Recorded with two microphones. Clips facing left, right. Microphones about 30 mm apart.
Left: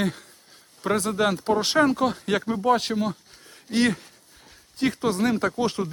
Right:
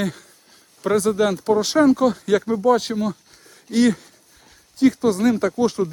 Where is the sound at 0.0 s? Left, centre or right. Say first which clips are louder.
Right 1 dB; centre.